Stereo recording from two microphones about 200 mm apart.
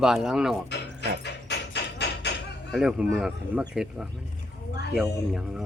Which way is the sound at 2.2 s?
60° left (ahead or behind).